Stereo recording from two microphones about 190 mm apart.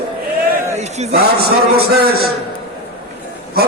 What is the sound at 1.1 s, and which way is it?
A man's voice, 55° right (ahead or behind).